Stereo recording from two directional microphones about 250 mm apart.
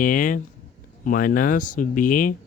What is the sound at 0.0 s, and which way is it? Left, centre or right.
Speech, left.